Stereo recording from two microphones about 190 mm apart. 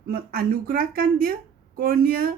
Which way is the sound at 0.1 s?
50° right (ahead or behind).